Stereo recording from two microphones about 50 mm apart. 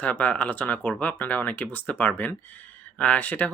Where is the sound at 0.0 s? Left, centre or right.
Left.